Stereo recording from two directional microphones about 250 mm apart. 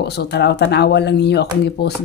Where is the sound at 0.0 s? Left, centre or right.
Left.